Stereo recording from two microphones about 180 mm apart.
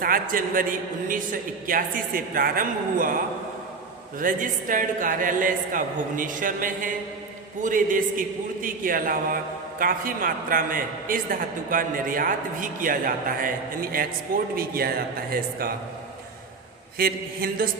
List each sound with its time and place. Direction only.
0.0 s a man's voice: 50° right (ahead or behind)
4.2 s a man's voice: 50° right (ahead or behind)
17.0 s speech: 55° right (ahead or behind)